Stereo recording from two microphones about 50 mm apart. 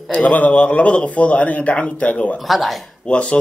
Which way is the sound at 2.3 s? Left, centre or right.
Centre.